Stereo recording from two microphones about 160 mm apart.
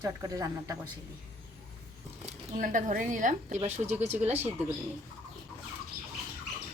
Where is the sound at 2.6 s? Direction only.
55° right (ahead or behind).